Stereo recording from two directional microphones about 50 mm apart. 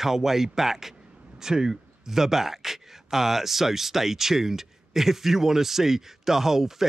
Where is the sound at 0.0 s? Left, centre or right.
Centre.